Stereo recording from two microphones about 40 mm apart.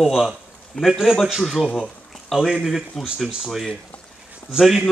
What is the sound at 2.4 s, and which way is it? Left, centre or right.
Speech, centre.